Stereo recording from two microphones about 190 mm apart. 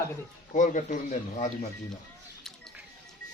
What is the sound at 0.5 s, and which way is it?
Speech, 40° left (ahead or behind).